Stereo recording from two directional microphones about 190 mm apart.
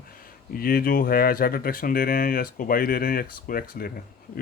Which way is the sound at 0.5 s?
50° left (ahead or behind).